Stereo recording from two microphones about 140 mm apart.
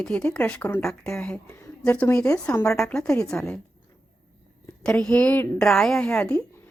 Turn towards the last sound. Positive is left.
turn(degrees=10)  # may be behind; listen again after turning